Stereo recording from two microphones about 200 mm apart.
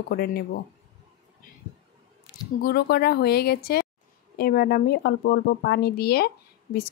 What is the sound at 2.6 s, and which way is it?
A woman's voice, 50° left (ahead or behind).